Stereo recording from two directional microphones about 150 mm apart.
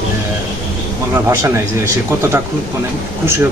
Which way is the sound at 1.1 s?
20° right (ahead or behind).